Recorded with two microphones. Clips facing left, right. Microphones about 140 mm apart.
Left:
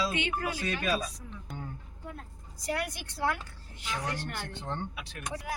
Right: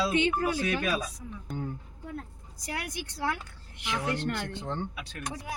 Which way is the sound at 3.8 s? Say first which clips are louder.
Right 3 dB; 80° right.